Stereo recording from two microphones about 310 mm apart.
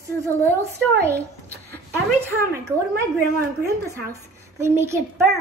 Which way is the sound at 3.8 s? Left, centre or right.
Centre.